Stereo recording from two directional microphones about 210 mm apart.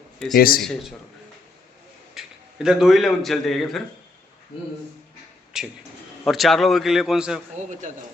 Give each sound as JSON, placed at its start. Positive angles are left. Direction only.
{"t": 0.3, "sound": "a man's voice", "side_deg": 45}
{"t": 0.6, "sound": "a man's voice", "side_deg": 0}
{"t": 2.2, "sound": "a sound", "side_deg": 0}
{"t": 2.6, "sound": "a man's voice", "side_deg": 0}
{"t": 5.5, "sound": "a man's voice", "side_deg": -5}